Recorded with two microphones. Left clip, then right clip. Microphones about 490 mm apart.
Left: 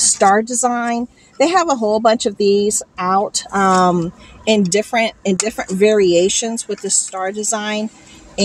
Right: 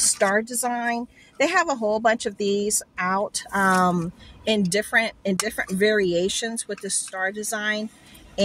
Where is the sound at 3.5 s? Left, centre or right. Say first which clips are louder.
Left 7 dB; right.